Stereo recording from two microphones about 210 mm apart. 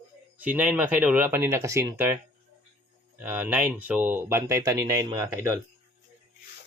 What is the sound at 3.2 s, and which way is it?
Speech, 10° right (ahead or behind).